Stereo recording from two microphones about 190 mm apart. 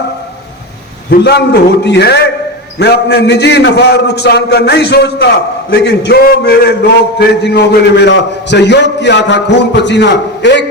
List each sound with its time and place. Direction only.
1.1 s a man's voice: 60° left (ahead or behind)